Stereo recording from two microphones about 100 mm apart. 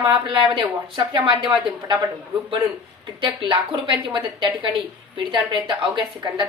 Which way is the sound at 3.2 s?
60° right (ahead or behind).